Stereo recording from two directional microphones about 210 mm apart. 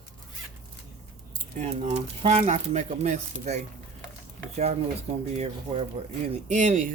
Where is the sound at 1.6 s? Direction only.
30° right (ahead or behind).